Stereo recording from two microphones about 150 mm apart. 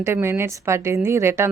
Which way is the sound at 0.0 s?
15° right (ahead or behind).